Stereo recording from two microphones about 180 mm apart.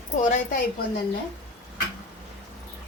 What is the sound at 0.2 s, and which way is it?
Speech, 45° left (ahead or behind).